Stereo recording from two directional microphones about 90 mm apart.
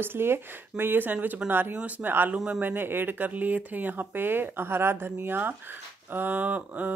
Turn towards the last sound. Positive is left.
turn(degrees=-15)  # may be behind; listen again after turning